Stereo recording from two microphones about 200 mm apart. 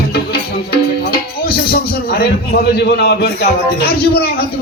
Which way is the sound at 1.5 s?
50° left (ahead or behind).